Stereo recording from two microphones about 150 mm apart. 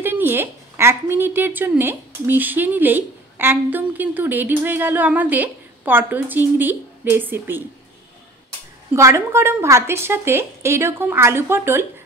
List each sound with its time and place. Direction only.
0.0 s a woman's voice: 15° right (ahead or behind)
8.9 s a woman's voice: 20° right (ahead or behind)